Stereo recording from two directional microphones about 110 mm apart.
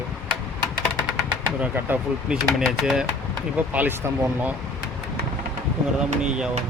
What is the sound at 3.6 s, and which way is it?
Speech, 15° right (ahead or behind).